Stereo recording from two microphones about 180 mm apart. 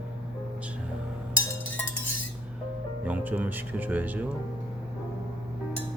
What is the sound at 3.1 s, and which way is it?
Speech, 10° right (ahead or behind).